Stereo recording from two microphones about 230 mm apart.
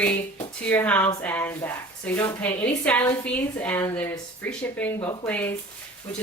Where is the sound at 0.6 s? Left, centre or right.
Centre.